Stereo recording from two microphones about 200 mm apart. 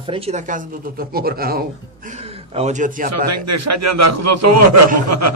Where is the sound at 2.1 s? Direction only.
30° right (ahead or behind).